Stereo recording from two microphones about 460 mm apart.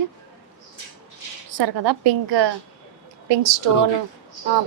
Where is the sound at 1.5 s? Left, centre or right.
Right.